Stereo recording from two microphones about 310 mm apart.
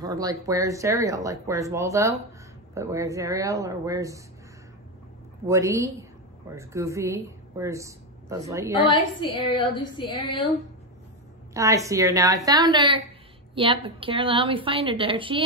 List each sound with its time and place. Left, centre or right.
0.0 s a woman's voice: centre
5.5 s a woman's voice: centre
8.8 s a woman's voice: centre
11.5 s a woman's voice: centre